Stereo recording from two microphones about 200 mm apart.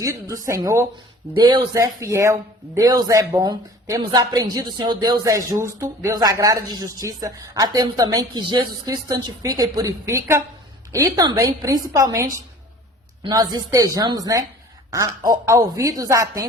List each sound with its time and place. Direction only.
0.0 s a woman's voice: 15° right (ahead or behind)